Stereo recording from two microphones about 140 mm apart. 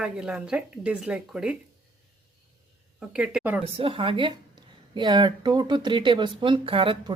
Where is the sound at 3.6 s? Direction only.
40° right (ahead or behind).